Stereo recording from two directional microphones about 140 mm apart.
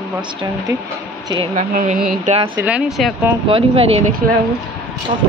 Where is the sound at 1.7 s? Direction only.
90° right.